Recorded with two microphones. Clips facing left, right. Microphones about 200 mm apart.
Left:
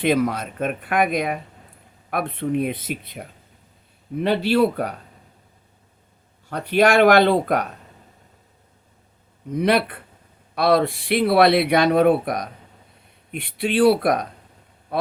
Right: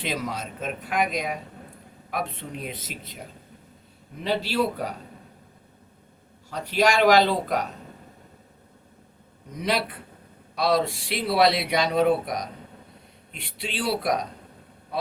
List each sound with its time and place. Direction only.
0.0 s speech: 55° left (ahead or behind)
6.5 s speech: 60° left (ahead or behind)
9.5 s speech: 60° left (ahead or behind)